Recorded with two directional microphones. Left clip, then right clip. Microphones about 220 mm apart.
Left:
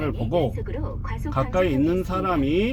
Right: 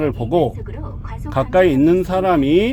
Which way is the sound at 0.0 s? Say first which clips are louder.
Right 7 dB; 45° right (ahead or behind).